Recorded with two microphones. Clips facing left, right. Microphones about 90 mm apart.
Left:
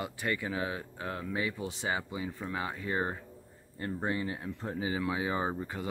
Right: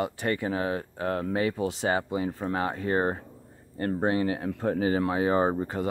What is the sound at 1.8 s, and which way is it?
Speech, 55° right (ahead or behind).